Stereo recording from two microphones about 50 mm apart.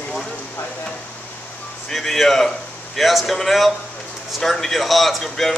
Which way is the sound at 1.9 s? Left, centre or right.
Centre.